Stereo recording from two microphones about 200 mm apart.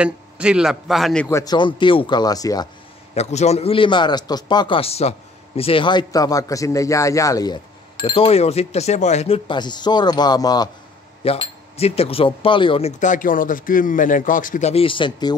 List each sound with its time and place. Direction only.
0.0 s a man's voice: 5° right (ahead or behind)
1.3 s a man's voice: 20° left (ahead or behind)
3.2 s a man's voice: 35° left (ahead or behind)
11.2 s speech: 30° left (ahead or behind)